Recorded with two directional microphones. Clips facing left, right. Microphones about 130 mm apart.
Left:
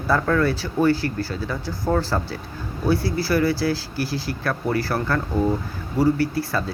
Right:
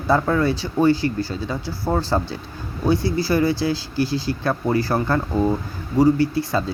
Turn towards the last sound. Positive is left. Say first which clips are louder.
# right 2 dB
turn(degrees=-20)  # may be behind; listen again after turning